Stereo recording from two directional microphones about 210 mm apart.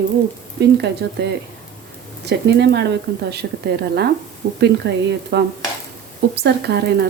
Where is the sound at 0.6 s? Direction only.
55° right (ahead or behind).